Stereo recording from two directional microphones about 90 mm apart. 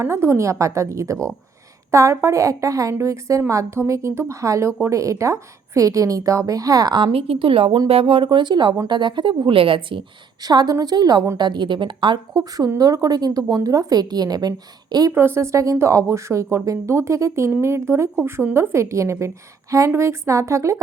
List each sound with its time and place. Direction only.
0.0 s a woman's voice: 30° right (ahead or behind); by 9.3 s 60° right (ahead or behind)
9.5 s a woman's voice: 80° right
10.4 s speech: 50° right (ahead or behind)
15.1 s a woman's voice: 25° right (ahead or behind)